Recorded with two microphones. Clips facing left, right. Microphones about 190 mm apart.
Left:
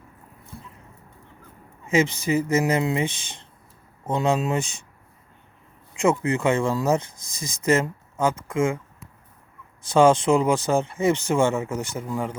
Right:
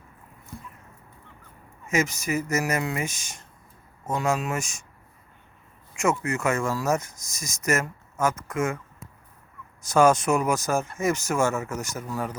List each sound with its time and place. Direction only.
1.9 s speech: 30° left (ahead or behind)
6.0 s speech: 30° left (ahead or behind)
8.1 s speech: 15° left (ahead or behind)
8.4 s speech: 30° left (ahead or behind)
9.9 s speech: 30° left (ahead or behind)
12.0 s speech: 15° left (ahead or behind)